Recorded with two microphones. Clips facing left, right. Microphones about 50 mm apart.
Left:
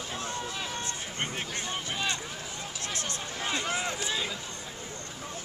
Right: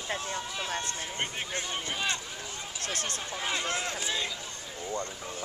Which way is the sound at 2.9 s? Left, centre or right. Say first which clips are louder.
Right 2 dB; right.